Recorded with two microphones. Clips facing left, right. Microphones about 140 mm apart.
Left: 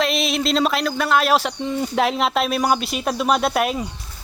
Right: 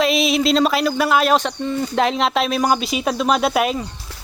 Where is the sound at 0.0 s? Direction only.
Centre (ahead or behind).